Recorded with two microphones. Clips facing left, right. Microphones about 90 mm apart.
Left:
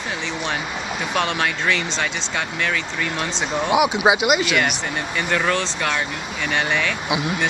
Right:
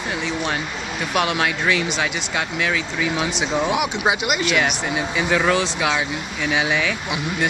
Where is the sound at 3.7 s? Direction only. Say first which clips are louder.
Left 4 dB; 5° left (ahead or behind).